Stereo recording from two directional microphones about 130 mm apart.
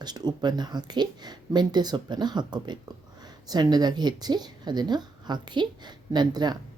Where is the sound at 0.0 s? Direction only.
30° right (ahead or behind).